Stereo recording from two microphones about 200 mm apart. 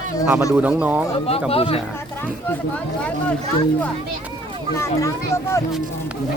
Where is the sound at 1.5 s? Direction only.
30° left (ahead or behind).